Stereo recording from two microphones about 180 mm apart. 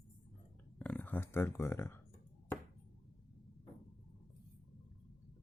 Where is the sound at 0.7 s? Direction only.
10° left (ahead or behind).